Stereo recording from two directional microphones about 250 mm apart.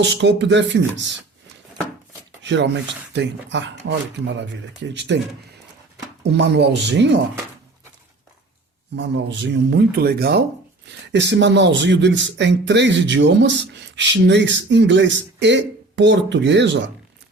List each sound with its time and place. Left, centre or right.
0.0 s speech: right
2.4 s a sound: right
3.1 s speech: right
6.2 s speech: right
9.0 s speech: right